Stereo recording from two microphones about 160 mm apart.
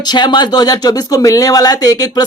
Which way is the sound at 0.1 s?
30° left (ahead or behind).